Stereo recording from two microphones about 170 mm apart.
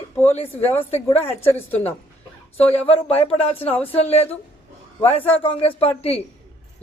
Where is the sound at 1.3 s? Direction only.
15° left (ahead or behind).